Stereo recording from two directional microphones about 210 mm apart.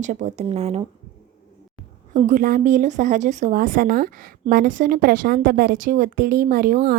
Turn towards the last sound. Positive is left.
turn(degrees=-45)  # may be behind; listen again after turning